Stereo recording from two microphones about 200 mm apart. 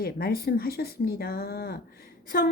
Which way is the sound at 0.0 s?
50° left (ahead or behind).